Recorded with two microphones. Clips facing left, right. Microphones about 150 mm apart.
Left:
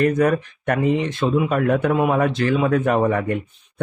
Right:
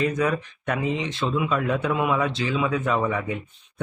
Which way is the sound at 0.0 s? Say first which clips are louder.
Left 6 dB; 55° left (ahead or behind).